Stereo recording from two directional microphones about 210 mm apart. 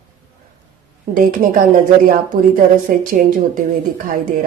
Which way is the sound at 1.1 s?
40° right (ahead or behind).